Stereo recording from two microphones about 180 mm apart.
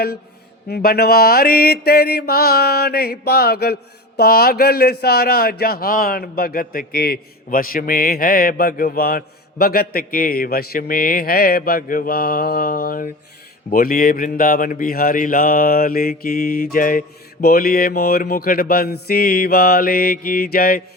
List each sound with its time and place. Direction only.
0.7 s speech: 55° left (ahead or behind)